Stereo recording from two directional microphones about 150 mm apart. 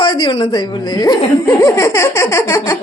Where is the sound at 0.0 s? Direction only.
30° left (ahead or behind).